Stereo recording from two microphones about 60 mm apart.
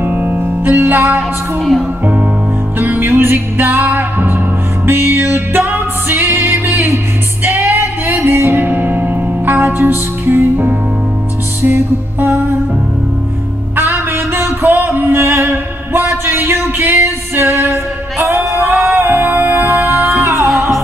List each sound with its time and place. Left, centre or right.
0.0 s music: right
1.6 s speech: centre
3.1 s music: right
3.3 s music: right
13.7 s music: right
18.2 s music: right
18.9 s music: right